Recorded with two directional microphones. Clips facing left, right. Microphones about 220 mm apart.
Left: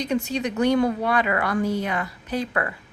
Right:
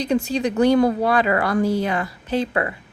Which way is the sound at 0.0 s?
30° right (ahead or behind).